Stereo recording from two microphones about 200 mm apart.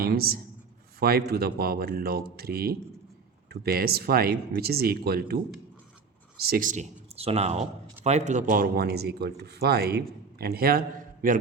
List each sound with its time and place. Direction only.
0.0 s speech: 50° right (ahead or behind)
6.4 s speech: 45° right (ahead or behind)